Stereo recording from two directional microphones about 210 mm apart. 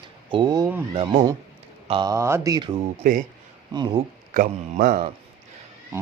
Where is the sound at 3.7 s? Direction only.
20° right (ahead or behind).